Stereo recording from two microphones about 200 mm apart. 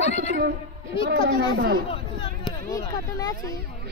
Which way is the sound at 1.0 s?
50° right (ahead or behind).